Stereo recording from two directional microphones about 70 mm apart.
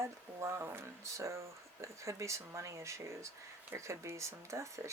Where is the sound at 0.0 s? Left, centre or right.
Right.